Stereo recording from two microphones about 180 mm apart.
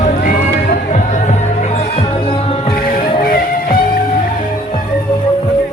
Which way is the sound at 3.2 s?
50° left (ahead or behind).